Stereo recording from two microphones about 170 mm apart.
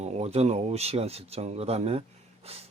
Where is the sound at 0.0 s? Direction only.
40° right (ahead or behind).